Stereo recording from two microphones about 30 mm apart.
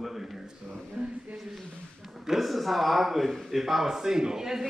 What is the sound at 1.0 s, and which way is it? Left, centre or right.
Speech, right.